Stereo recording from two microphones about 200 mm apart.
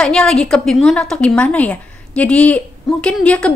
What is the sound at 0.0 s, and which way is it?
A woman's voice, 5° left (ahead or behind).